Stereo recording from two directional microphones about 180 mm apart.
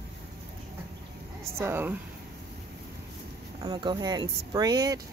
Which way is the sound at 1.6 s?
10° right (ahead or behind).